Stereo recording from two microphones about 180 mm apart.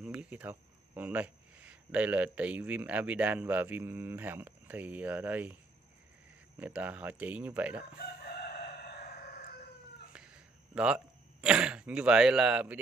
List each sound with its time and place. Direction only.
0.0 s speech: 5° right (ahead or behind)
6.6 s speech: 10° right (ahead or behind)
8.4 s chicken: 60° left (ahead or behind)
10.7 s speech: 5° right (ahead or behind)